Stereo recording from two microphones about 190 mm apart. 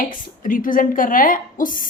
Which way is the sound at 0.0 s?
45° left (ahead or behind).